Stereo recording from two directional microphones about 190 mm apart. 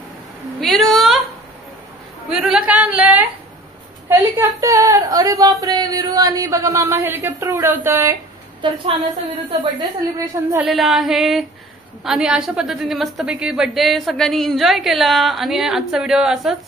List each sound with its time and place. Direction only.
0.6 s a sound: centre (ahead or behind)
2.3 s a woman's voice: 5° right (ahead or behind)
8.5 s a woman's voice: 25° right (ahead or behind)
10.6 s a woman's voice: centre (ahead or behind)